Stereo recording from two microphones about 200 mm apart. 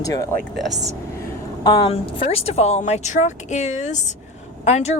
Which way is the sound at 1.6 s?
25° left (ahead or behind).